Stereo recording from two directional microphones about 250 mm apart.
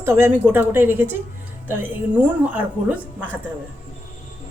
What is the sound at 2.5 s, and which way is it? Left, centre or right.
Speech, centre.